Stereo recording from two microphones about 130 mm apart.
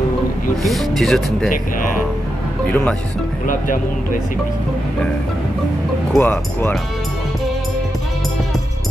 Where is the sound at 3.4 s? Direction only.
90° left.